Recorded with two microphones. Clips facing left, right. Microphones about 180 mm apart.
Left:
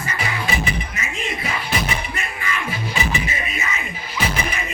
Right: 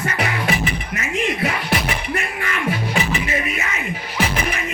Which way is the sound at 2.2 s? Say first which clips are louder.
Right 2 dB; 60° right (ahead or behind).